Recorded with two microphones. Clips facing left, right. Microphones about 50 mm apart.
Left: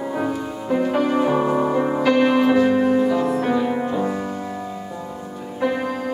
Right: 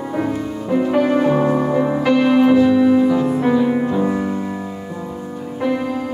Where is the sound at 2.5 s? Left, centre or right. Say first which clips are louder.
Right 4 dB; left.